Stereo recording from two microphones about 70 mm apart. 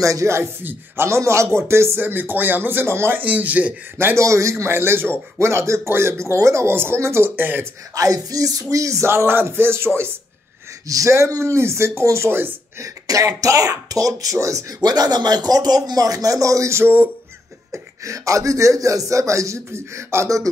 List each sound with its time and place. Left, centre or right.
0.0 s speech: right
4.2 s speech: right
7.9 s speech: right
10.9 s speech: right
12.8 s speech: right
14.8 s speech: right
16.8 s a sound: right
17.6 s speech: right